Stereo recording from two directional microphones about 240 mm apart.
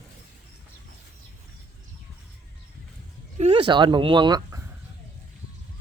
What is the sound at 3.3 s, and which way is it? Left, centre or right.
Speech, right.